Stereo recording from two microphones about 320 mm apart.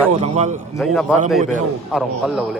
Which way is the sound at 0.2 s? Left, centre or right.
Right.